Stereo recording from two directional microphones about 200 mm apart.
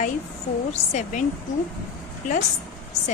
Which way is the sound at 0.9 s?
35° left (ahead or behind).